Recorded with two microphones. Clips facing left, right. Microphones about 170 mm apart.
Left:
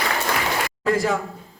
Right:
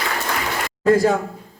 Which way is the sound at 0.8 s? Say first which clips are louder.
Right 6 dB; 40° right (ahead or behind).